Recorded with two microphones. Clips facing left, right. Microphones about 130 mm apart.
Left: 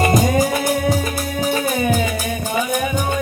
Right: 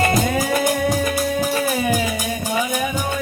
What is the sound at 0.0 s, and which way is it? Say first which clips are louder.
Music: left 3 dB; 10° left (ahead or behind).